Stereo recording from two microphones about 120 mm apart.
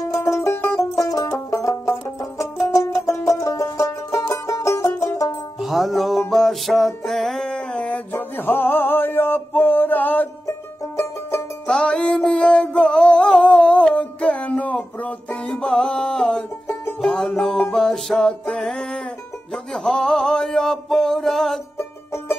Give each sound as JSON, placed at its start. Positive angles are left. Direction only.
{"t": 0.0, "sound": "music", "side_deg": 25}
{"t": 5.6, "sound": "music", "side_deg": 0}
{"t": 11.6, "sound": "music", "side_deg": 5}